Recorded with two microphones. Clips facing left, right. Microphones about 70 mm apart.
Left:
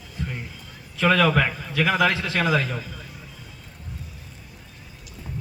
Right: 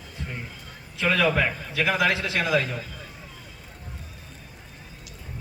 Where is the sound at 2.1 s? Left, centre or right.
Centre.